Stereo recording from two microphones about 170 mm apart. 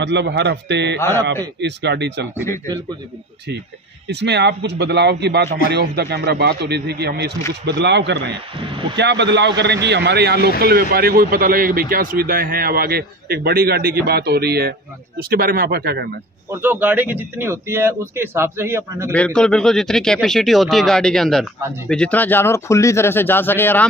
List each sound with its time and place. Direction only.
0.0 s a man's voice: 90° right
0.9 s a man's voice: 15° left (ahead or behind)
1.6 s a man's voice: 90° right
4.1 s a man's voice: 85° right
5.7 s speech: 70° right (ahead or behind)
7.6 s a man's voice: 90° right; by 16.1 s 70° right (ahead or behind)
16.4 s speech: 10° right (ahead or behind)
19.1 s speech: 5° left (ahead or behind)